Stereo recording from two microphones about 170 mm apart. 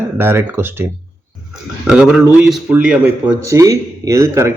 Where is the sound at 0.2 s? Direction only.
15° right (ahead or behind).